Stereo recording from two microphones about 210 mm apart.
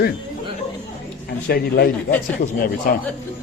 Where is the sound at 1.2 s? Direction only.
50° left (ahead or behind).